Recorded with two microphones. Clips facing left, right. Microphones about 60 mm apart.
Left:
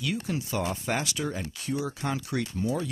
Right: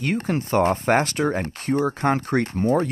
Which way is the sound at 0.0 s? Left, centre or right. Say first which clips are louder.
Right 7 dB; right.